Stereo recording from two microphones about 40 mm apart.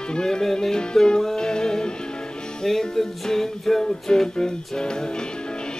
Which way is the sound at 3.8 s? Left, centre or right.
Centre.